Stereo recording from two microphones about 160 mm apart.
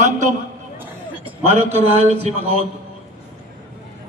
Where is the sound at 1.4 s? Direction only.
45° right (ahead or behind).